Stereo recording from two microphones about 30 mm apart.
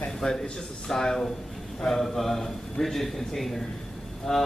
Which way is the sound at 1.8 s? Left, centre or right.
Centre.